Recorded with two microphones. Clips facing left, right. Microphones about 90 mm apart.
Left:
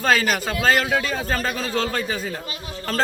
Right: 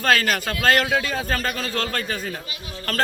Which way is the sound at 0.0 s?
5° left (ahead or behind).